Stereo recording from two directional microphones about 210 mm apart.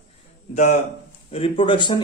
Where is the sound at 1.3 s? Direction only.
25° left (ahead or behind).